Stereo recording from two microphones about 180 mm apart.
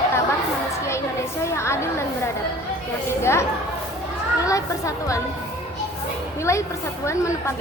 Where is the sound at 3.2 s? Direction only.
15° left (ahead or behind).